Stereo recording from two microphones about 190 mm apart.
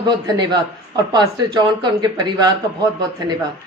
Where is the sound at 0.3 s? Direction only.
20° right (ahead or behind).